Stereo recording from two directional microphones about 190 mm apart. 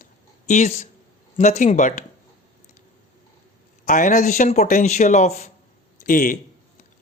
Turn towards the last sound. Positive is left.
turn(degrees=45)  # may be behind; listen again after turning